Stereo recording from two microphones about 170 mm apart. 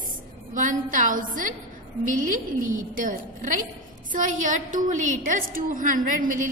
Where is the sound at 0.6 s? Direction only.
50° right (ahead or behind).